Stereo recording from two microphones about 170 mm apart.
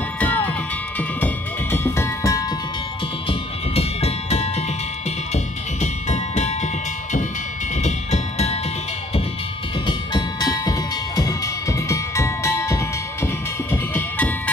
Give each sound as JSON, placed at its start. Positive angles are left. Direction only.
{"t": 0.9, "sound": "music", "side_deg": 10}
{"t": 3.3, "sound": "music", "side_deg": 35}
{"t": 9.8, "sound": "music", "side_deg": 25}